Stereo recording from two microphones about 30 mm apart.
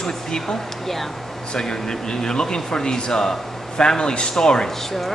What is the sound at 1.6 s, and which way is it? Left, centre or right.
Speech, left.